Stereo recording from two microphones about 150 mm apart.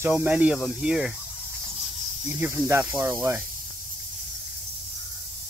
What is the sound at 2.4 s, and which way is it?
Speech, 15° right (ahead or behind).